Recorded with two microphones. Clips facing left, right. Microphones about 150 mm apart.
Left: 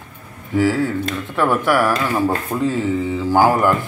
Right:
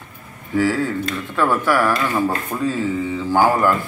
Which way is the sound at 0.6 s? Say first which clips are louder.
Left 1 dB; 15° left (ahead or behind).